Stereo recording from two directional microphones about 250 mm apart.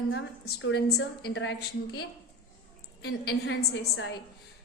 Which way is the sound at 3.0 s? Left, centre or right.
Left.